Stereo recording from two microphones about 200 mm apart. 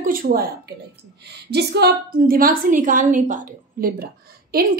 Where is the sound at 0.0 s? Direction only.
45° right (ahead or behind).